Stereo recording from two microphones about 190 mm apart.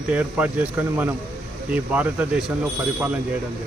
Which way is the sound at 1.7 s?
10° right (ahead or behind).